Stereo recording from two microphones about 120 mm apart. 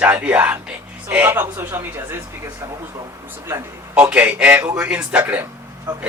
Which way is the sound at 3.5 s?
20° right (ahead or behind).